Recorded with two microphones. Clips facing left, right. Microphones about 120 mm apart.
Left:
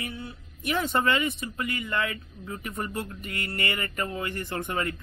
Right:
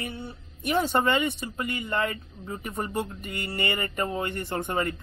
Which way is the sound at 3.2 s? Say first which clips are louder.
Right 1 dB; centre (ahead or behind).